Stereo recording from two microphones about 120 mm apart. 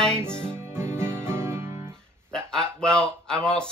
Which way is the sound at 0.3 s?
5° left (ahead or behind).